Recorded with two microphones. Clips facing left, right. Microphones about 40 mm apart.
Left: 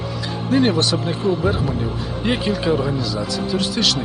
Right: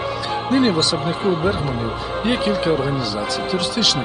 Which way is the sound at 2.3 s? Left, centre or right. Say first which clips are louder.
Right 1 dB; centre.